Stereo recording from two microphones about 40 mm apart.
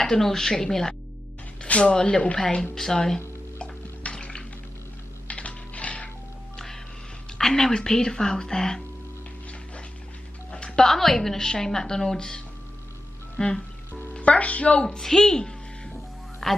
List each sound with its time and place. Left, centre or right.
0.0 s a woman's voice: centre
3.5 s a sound: left
5.3 s typewriter: left
7.3 s a woman's voice: centre
10.5 s music: left
10.9 s a woman's voice: centre
13.4 s music: left
14.1 s a woman's voice: left
15.0 s a sound: centre
16.4 s speech: centre